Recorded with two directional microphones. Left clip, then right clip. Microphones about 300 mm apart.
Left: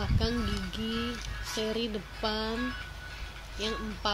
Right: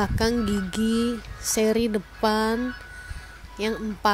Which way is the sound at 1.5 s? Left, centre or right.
Right.